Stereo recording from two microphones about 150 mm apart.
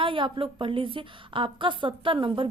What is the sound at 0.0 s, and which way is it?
A woman's voice, 35° right (ahead or behind).